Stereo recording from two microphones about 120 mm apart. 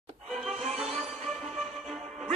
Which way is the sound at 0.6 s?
55° right (ahead or behind).